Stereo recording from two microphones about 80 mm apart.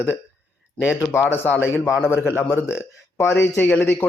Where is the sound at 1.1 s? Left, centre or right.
Left.